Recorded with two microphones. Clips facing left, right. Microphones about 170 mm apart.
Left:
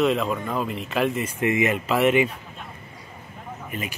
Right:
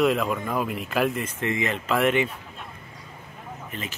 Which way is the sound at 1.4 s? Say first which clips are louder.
Left 5 dB; 15° left (ahead or behind).